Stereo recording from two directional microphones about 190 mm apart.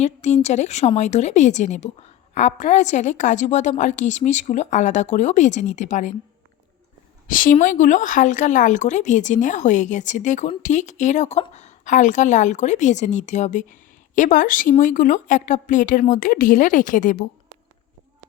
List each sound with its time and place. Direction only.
0.0 s speech: 35° left (ahead or behind)
7.3 s a woman's voice: 45° left (ahead or behind)